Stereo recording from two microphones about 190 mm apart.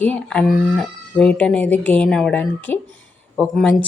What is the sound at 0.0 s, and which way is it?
A woman's voice, 5° left (ahead or behind).